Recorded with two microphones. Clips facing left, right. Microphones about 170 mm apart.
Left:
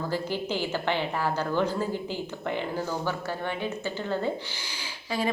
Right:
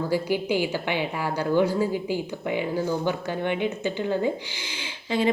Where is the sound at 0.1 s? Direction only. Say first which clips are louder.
Right 7 dB; 10° right (ahead or behind).